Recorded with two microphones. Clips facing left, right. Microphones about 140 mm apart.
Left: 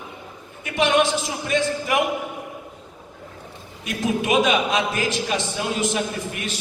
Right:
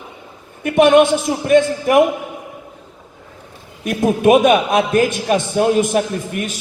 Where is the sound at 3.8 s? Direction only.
50° right (ahead or behind).